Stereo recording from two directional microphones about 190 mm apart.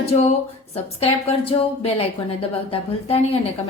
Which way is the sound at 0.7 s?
30° left (ahead or behind).